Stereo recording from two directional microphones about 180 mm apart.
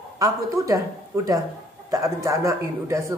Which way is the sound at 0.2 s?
20° right (ahead or behind).